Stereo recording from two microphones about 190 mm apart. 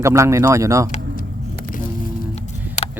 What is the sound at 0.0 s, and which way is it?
Speech, 15° right (ahead or behind).